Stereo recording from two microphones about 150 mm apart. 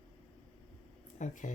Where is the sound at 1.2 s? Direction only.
55° left (ahead or behind).